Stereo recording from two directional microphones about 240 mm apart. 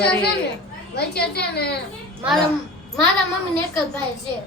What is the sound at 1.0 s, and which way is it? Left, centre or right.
Speech, left.